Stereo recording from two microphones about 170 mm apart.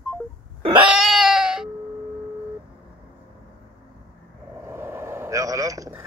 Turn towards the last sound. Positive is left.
turn(degrees=-20)  # may be behind; listen again after turning